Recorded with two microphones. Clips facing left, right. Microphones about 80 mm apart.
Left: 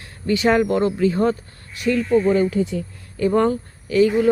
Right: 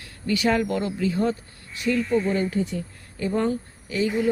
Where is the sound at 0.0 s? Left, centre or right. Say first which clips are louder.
Left 4 dB; left.